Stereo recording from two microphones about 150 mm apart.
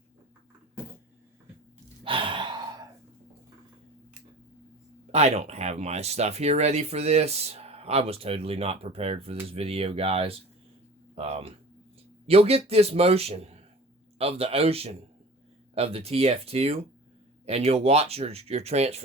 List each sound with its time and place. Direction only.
2.0 s sigh: 35° right (ahead or behind)
5.1 s a man's voice: 45° right (ahead or behind)